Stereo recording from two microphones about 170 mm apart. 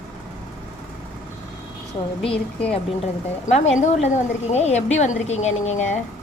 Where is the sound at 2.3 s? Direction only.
5° left (ahead or behind).